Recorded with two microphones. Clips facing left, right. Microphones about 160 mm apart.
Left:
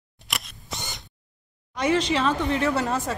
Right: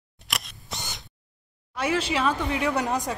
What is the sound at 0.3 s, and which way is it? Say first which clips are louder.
Camera: even; centre (ahead or behind).